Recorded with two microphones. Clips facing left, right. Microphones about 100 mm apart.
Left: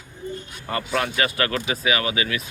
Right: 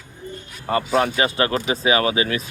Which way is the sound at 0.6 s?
30° right (ahead or behind).